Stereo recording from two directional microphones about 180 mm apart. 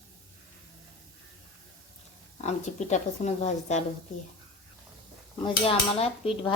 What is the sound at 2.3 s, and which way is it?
Speech, 40° left (ahead or behind).